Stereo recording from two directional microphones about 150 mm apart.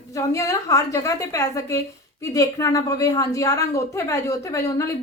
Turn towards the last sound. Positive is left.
turn(degrees=20)  # may be behind; listen again after turning